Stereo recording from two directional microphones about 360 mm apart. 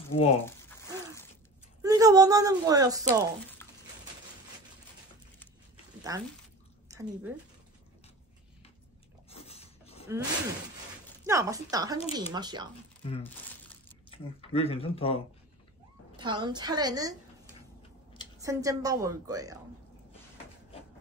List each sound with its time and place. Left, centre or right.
0.2 s a sound: centre
1.8 s speech: centre
3.6 s a sound: centre
6.1 s speech: centre
9.3 s a sound: centre
11.2 s speech: centre
13.0 s speech: centre
16.2 s speech: centre
18.4 s speech: centre